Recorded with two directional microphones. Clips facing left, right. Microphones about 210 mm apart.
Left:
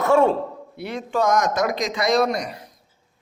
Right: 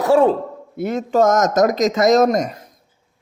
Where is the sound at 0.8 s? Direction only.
45° right (ahead or behind).